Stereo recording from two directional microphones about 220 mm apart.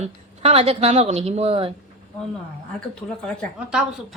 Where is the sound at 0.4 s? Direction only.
25° right (ahead or behind).